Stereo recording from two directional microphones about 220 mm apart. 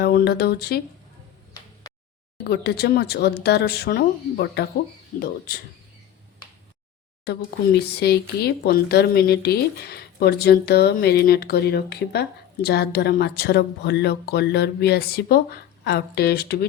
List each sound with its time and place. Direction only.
0.0 s speech: 45° left (ahead or behind)
2.4 s speech: 50° left (ahead or behind)
7.3 s speech: 50° left (ahead or behind)